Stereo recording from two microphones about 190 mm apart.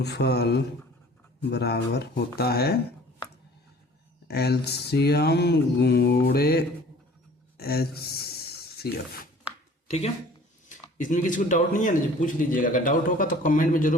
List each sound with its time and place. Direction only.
0.0 s speech: 60° left (ahead or behind)
4.3 s speech: 55° left (ahead or behind)
7.5 s a sound: 55° left (ahead or behind)
10.9 s a man's voice: 40° left (ahead or behind)